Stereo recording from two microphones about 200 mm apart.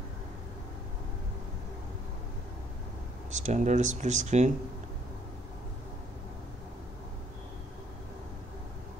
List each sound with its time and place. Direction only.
3.3 s speech: 35° right (ahead or behind)